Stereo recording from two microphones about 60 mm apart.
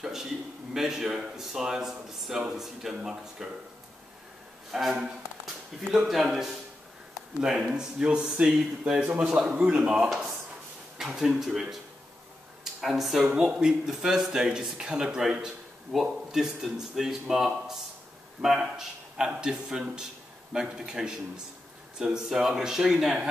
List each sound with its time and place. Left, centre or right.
0.0 s speech: centre
4.7 s speech: centre
5.9 s speech: centre
12.8 s speech: centre